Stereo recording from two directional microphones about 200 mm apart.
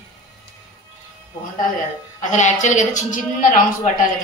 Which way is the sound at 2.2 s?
40° left (ahead or behind).